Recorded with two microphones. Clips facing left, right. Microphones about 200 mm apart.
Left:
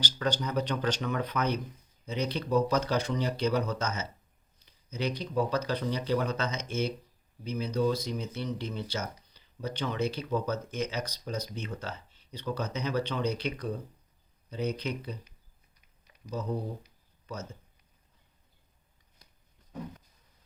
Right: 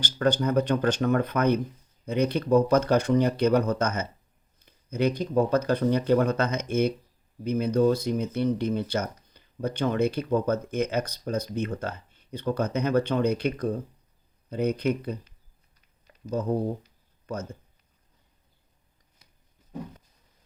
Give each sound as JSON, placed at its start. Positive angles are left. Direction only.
{"t": 0.0, "sound": "speech", "side_deg": -50}
{"t": 16.3, "sound": "speech", "side_deg": -55}